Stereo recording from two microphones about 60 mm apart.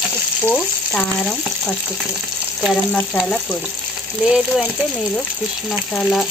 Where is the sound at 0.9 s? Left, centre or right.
Centre.